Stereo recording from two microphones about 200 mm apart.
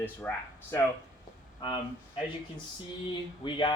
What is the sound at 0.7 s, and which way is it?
Speech, 15° left (ahead or behind).